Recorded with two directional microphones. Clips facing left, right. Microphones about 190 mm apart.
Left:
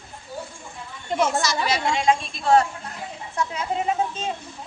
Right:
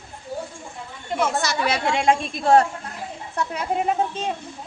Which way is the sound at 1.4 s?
60° right (ahead or behind).